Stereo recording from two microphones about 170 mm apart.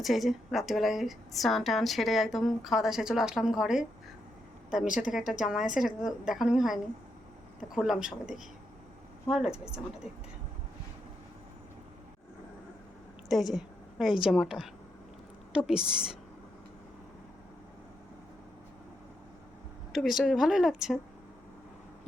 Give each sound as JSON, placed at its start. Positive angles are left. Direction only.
{"t": 0.0, "sound": "a woman's voice", "side_deg": 0}
{"t": 4.9, "sound": "a woman's voice", "side_deg": 50}
{"t": 5.1, "sound": "a woman's voice", "side_deg": 0}
{"t": 13.2, "sound": "a woman's voice", "side_deg": 0}
{"t": 19.9, "sound": "a woman's voice", "side_deg": 0}